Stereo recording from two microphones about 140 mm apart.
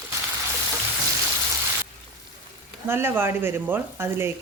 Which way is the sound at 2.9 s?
15° right (ahead or behind).